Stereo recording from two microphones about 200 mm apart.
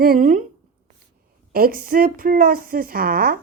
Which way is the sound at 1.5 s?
45° right (ahead or behind).